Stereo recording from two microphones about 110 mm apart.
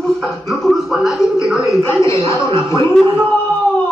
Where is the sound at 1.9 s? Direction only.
25° left (ahead or behind).